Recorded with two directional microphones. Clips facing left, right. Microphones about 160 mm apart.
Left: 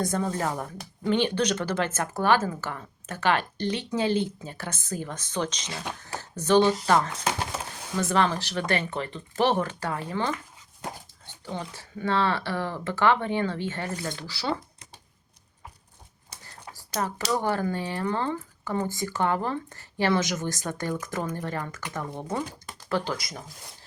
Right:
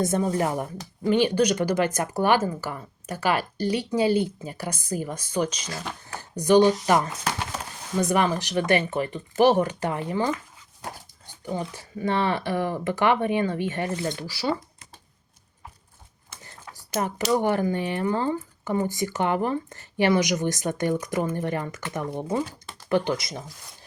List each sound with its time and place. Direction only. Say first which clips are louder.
0.0 s speech: right 4 dB; 25° right (ahead or behind)
17.0 s speech: right 4 dB; 20° right (ahead or behind)